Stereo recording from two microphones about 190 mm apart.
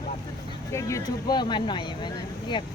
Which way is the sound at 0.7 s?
15° left (ahead or behind).